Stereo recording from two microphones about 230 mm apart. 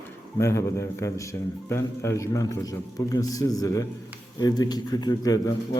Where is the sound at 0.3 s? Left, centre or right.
Centre.